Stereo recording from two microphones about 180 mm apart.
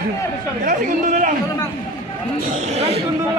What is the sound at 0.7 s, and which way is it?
Chatter, 45° right (ahead or behind).